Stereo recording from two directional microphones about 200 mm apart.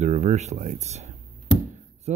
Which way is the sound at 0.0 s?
35° right (ahead or behind).